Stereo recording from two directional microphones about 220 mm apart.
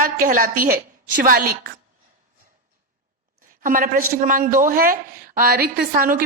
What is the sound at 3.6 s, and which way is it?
A woman's voice, 40° right (ahead or behind).